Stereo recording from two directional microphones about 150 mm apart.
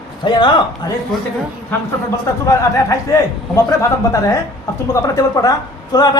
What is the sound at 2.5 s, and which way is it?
Speech, 20° left (ahead or behind).